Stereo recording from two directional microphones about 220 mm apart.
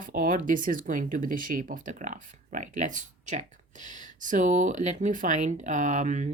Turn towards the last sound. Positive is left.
turn(degrees=-35)  # may be behind; listen again after turning